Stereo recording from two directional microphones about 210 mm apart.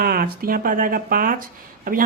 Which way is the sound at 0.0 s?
45° right (ahead or behind).